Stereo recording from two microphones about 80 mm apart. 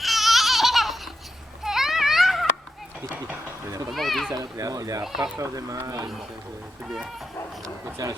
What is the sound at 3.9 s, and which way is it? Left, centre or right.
Speech, centre.